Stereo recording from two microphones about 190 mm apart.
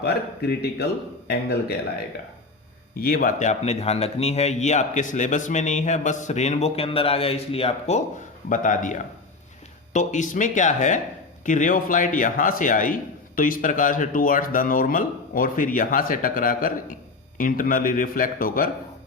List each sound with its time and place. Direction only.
0.0 s speech: 60° left (ahead or behind)
2.9 s speech: 50° left (ahead or behind); by 8.0 s 35° left (ahead or behind)
8.4 s a man's voice: 45° left (ahead or behind)